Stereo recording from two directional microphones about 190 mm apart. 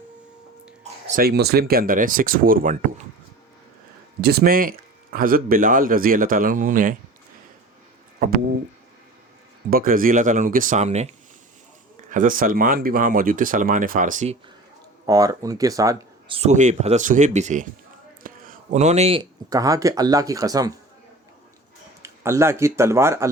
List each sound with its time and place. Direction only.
1.2 s speech: 55° right (ahead or behind)
4.2 s speech: 55° right (ahead or behind)
9.6 s speech: 50° right (ahead or behind)
12.1 s speech: 45° right (ahead or behind)
15.0 s speech: 20° right (ahead or behind)
16.3 s speech: 35° right (ahead or behind); by 20.7 s 20° right (ahead or behind)
22.0 s speech: 15° right (ahead or behind)